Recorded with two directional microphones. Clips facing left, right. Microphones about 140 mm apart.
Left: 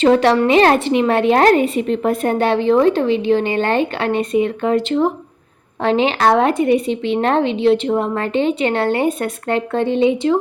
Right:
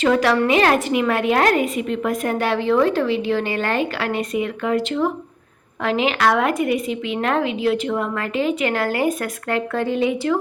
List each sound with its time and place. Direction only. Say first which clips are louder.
0.0 s a woman's voice: left 4 dB; 30° left (ahead or behind)